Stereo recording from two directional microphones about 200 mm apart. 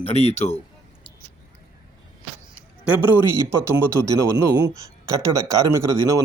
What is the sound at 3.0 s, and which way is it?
A man's voice, 10° right (ahead or behind).